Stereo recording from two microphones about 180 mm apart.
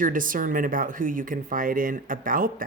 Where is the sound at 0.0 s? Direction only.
50° right (ahead or behind).